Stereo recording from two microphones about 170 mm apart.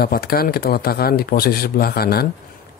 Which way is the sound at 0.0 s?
65° left (ahead or behind).